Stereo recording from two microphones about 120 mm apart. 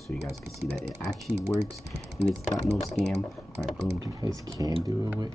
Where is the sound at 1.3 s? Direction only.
25° right (ahead or behind).